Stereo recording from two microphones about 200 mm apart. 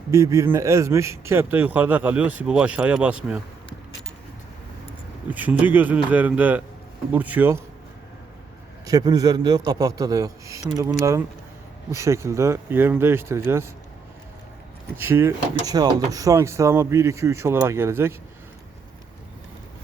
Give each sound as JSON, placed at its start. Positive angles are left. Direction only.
{"t": 0.1, "sound": "speech", "side_deg": -15}
{"t": 5.3, "sound": "speech", "side_deg": -10}
{"t": 8.9, "sound": "speech", "side_deg": -20}
{"t": 14.9, "sound": "speech", "side_deg": -10}